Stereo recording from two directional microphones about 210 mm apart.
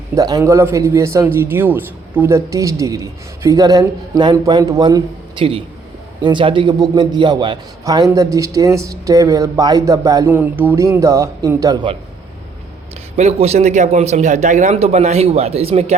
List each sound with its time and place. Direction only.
0.2 s a man's voice: 15° right (ahead or behind)
13.1 s a man's voice: 30° right (ahead or behind)